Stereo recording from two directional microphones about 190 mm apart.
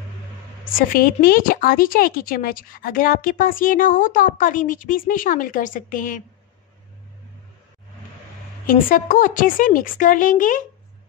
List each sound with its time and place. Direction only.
0.7 s a woman's voice: 50° left (ahead or behind)
8.6 s a woman's voice: 45° left (ahead or behind)